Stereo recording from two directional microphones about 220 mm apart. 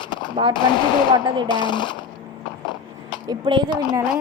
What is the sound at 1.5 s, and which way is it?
Speech, 20° left (ahead or behind).